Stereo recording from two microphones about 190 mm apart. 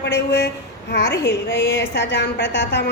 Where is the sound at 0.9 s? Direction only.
65° left (ahead or behind).